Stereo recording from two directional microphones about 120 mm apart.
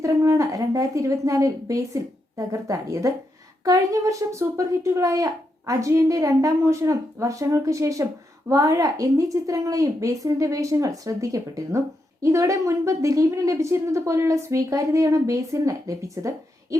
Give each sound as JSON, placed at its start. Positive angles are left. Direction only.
{"t": 0.0, "sound": "a child's voice", "side_deg": -25}